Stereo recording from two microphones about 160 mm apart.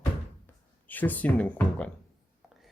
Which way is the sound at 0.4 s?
10° left (ahead or behind).